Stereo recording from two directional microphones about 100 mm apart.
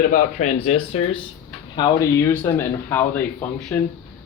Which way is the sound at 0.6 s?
90° left.